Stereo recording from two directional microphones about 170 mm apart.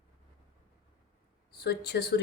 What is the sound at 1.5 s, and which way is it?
Speech, 70° left (ahead or behind).